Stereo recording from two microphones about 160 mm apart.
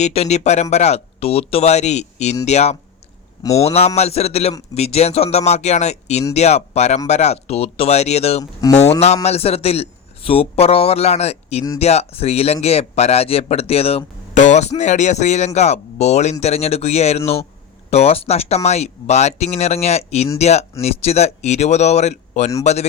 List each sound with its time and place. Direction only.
0.0 s a man's voice: 40° left (ahead or behind)